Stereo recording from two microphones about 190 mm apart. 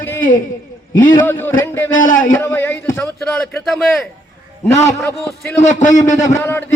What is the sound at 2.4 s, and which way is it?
A man's voice, 10° left (ahead or behind).